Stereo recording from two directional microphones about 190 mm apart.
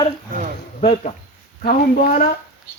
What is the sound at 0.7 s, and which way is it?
Speech, 35° left (ahead or behind).